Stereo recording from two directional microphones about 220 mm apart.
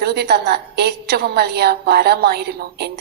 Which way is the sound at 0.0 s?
50° right (ahead or behind).